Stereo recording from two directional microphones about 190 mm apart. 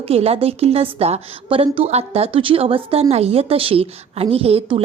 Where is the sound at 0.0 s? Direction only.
30° right (ahead or behind).